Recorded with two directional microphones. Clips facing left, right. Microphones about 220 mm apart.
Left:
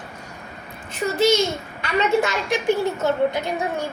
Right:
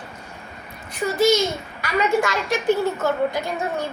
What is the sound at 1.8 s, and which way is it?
A woman's voice, 25° left (ahead or behind).